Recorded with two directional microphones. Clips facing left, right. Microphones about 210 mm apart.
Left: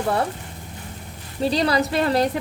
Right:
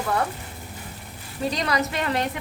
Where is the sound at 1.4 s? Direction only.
30° left (ahead or behind).